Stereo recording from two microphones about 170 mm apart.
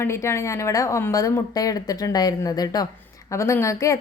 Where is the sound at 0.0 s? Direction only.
15° left (ahead or behind).